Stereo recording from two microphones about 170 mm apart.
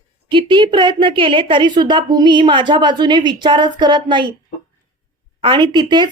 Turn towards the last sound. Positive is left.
turn(degrees=-25)  # may be behind; listen again after turning